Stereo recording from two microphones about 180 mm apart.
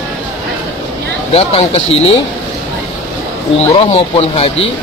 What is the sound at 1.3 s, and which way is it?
Speech, 35° left (ahead or behind).